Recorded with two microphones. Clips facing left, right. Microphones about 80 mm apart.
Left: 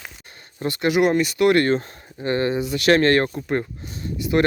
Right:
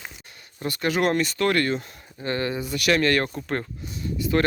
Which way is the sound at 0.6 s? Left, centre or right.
Left.